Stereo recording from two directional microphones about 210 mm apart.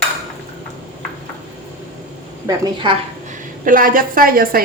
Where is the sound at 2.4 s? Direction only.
15° right (ahead or behind).